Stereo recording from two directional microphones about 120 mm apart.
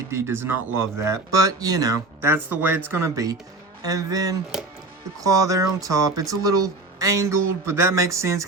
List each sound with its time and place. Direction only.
0.1 s speech: 20° right (ahead or behind)
2.3 s a man's voice: 15° right (ahead or behind)